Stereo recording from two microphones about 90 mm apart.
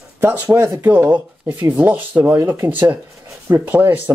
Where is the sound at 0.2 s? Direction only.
20° right (ahead or behind).